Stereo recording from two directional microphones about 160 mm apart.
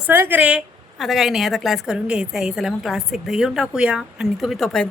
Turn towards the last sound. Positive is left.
turn(degrees=0)  # may be behind; listen again after turning